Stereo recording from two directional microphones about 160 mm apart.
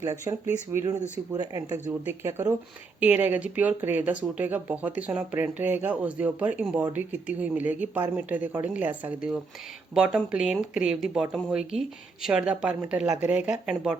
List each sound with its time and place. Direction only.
0.0 s speech: 20° right (ahead or behind); by 13.9 s 5° right (ahead or behind)